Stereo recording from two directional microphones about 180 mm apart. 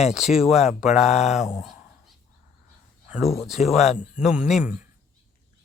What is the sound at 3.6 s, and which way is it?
Speech, 40° left (ahead or behind).